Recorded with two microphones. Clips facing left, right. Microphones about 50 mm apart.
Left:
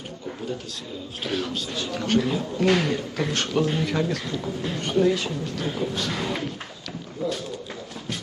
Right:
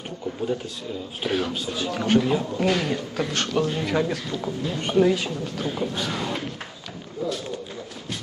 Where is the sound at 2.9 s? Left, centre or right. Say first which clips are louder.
Even; centre.